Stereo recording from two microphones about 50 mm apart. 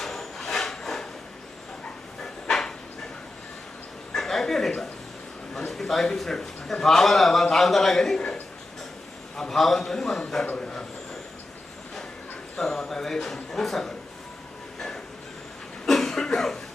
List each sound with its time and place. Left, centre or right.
0.0 s wood: centre
2.2 s dog: centre
4.1 s a sound: centre
5.5 s a man's voice: centre
9.3 s a man's voice: centre
12.5 s a man's voice: centre
14.8 s train: centre
15.9 s cough: centre